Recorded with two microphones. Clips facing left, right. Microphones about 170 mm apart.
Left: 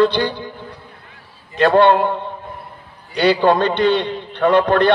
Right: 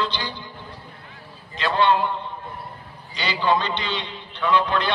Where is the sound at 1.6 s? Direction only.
55° left (ahead or behind).